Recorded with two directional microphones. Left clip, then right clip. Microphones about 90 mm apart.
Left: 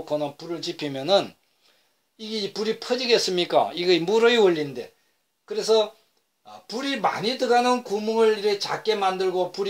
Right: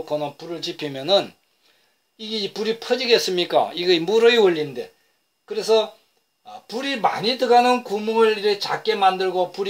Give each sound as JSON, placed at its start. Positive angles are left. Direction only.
{"t": 0.0, "sound": "speech", "side_deg": 35}